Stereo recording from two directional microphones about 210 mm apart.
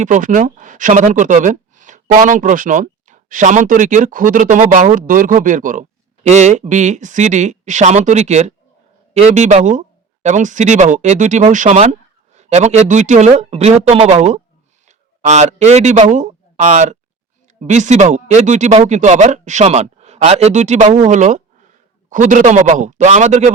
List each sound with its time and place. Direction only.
0.0 s speech: 35° right (ahead or behind)